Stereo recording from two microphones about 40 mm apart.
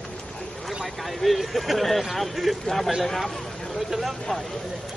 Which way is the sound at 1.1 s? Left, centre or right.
Centre.